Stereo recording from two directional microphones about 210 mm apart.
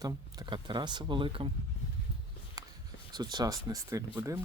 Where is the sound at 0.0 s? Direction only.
20° right (ahead or behind).